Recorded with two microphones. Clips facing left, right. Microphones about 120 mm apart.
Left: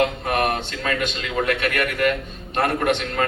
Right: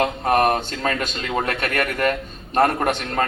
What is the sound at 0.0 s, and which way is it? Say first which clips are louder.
A man's voice: right 3 dB; 40° right (ahead or behind).